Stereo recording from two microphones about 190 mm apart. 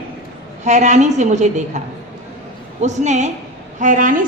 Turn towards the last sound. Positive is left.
turn(degrees=-45)  # may be behind; listen again after turning